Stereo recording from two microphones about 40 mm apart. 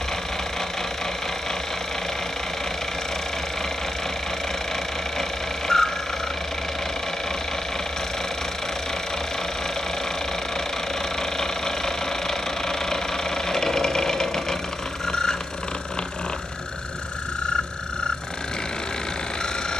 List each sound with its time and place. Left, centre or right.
5.7 s a sound: centre
11.3 s vehicle: centre
13.5 s engine: centre